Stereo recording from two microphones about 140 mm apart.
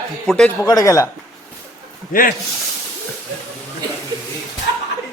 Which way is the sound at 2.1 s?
85° left.